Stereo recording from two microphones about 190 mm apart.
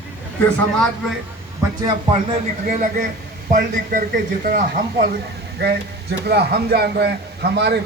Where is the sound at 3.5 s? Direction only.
50° right (ahead or behind).